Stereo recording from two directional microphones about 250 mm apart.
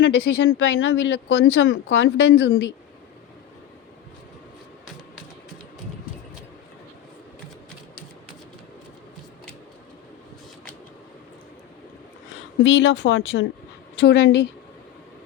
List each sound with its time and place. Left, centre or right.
0.0 s speech: left
12.6 s speech: left